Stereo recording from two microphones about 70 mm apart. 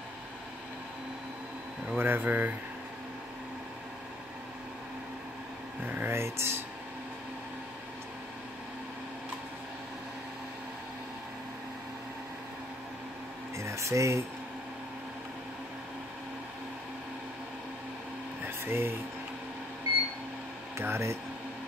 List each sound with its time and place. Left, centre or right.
2.0 s speech: right
5.9 s a sound: right
6.1 s speech: right
13.6 s a sound: right
18.7 s speech: right
20.7 s speech: right